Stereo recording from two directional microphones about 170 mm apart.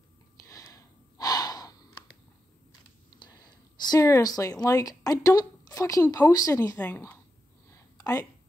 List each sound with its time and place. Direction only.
0.5 s breathing: 20° left (ahead or behind)
3.2 s speech: 25° left (ahead or behind)
7.7 s a sound: 20° left (ahead or behind)